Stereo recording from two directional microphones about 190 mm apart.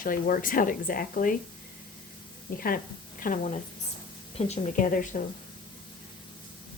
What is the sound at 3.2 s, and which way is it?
Speech, 45° left (ahead or behind).